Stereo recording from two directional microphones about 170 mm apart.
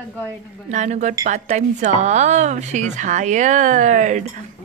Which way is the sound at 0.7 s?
45° right (ahead or behind).